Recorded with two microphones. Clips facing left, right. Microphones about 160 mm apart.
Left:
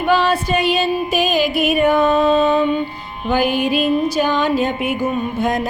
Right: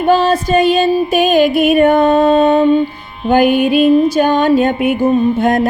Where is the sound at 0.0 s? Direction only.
45° right (ahead or behind).